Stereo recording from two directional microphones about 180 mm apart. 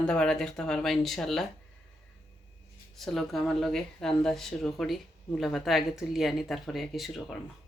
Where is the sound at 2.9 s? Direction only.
Centre (ahead or behind).